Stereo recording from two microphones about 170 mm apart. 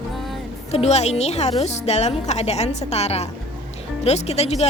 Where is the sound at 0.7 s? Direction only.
40° left (ahead or behind).